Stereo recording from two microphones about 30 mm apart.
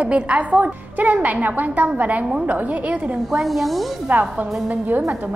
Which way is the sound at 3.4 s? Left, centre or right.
Centre.